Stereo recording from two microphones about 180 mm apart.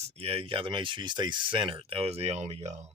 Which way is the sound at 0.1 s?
35° right (ahead or behind).